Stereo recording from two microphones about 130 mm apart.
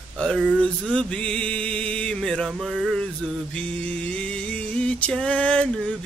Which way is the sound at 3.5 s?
10° left (ahead or behind).